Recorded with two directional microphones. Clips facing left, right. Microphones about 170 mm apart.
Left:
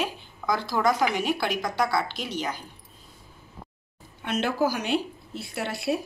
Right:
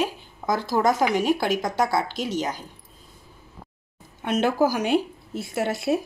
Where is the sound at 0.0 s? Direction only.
45° right (ahead or behind).